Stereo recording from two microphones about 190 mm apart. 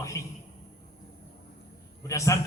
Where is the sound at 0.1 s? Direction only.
15° left (ahead or behind).